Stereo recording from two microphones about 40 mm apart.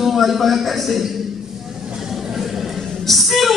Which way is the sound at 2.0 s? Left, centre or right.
Centre.